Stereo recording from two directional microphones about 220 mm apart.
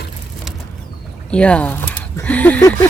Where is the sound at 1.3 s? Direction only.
5° left (ahead or behind).